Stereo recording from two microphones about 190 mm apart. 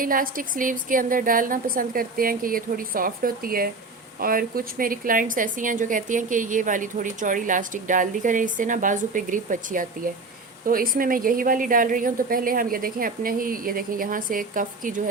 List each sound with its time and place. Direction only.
0.0 s a woman's voice: 50° right (ahead or behind)